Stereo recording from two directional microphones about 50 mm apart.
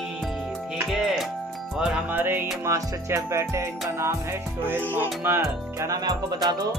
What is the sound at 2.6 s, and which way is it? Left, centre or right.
Music, right.